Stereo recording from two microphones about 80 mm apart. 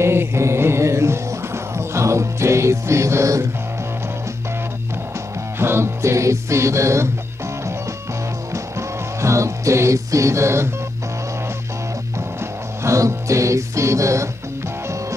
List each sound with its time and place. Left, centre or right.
0.0 s music: right
5.6 s music: right
8.7 s music: right
12.8 s music: right